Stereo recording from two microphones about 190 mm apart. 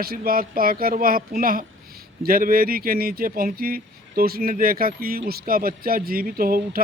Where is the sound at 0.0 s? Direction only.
50° right (ahead or behind).